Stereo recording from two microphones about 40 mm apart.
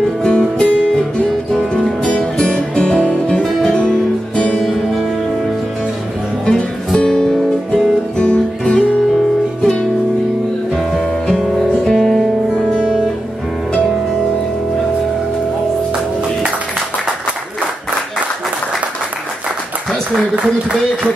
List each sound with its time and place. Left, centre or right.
0.0 s music: left
2.0 s music: left
4.6 s music: centre
6.5 s music: centre
8.2 s music: left
11.9 s music: centre
12.5 s music: centre